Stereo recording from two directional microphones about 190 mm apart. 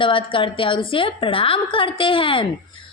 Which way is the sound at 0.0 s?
25° left (ahead or behind).